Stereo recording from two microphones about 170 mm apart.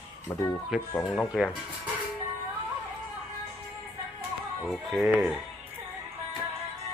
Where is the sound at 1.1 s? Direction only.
Centre (ahead or behind).